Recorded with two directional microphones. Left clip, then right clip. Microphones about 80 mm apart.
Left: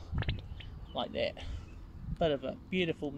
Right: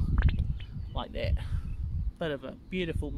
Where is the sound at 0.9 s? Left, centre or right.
Right.